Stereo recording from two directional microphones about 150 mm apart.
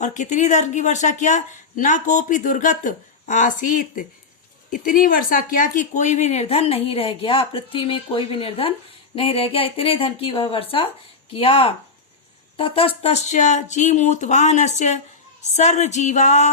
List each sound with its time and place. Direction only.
0.0 s speech: 55° left (ahead or behind)